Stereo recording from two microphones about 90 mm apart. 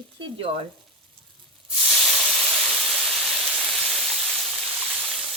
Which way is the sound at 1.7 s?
5° right (ahead or behind).